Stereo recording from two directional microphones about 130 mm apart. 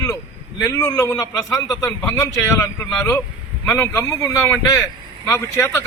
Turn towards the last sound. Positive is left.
turn(degrees=20)  # may be behind; listen again after turning